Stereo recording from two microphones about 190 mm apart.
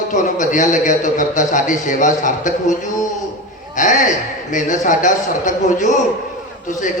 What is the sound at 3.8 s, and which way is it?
A man's voice, 40° left (ahead or behind).